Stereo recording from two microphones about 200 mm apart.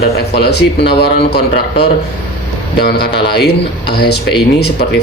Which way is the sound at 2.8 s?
55° left (ahead or behind).